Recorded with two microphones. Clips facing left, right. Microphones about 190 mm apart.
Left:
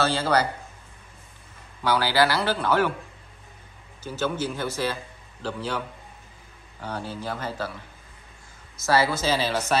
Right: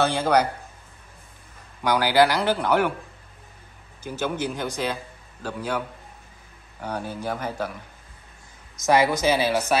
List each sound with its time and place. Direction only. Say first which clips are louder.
0.0 s speech: right 2 dB; 15° right (ahead or behind)
1.8 s speech: right 3 dB; 15° right (ahead or behind)
4.0 s speech: even; 15° right (ahead or behind)
8.8 s speech: right 3 dB; 15° right (ahead or behind)